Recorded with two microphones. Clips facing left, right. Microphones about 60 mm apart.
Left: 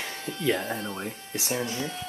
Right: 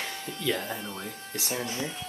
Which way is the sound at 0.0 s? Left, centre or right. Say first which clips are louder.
Left 3 dB; left.